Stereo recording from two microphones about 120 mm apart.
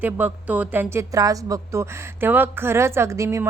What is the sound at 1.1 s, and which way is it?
A woman's voice, 30° right (ahead or behind).